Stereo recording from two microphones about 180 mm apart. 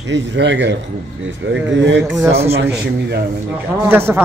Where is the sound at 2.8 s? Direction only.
70° right (ahead or behind).